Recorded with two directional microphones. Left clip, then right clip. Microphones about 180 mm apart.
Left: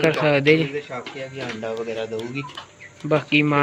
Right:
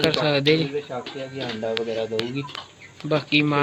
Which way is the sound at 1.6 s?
35° right (ahead or behind).